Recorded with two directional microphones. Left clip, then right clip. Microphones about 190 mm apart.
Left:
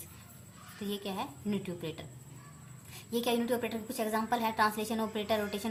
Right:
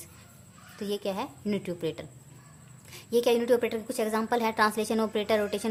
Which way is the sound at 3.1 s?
50° right (ahead or behind).